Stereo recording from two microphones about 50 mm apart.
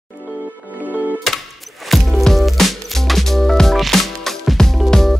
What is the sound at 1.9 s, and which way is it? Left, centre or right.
Music, centre.